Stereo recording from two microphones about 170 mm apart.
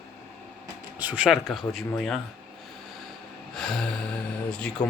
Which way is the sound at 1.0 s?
10° right (ahead or behind).